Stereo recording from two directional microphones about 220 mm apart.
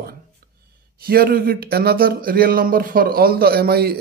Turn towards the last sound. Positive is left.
turn(degrees=-45)  # may be behind; listen again after turning